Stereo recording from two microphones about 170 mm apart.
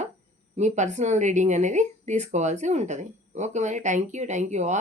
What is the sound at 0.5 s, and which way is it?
Speech, 45° right (ahead or behind).